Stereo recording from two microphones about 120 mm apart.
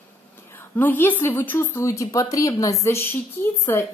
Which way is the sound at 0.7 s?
15° left (ahead or behind).